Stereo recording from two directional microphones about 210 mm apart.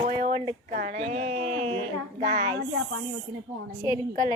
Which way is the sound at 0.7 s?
40° right (ahead or behind).